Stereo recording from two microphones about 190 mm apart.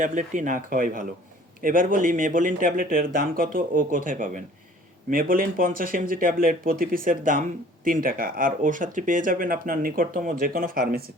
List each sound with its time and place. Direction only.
0.0 s speech: 40° right (ahead or behind)